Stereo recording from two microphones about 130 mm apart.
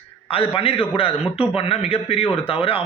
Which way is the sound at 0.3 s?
45° left (ahead or behind).